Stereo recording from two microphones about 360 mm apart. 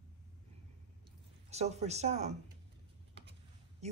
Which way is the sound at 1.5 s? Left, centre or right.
Centre.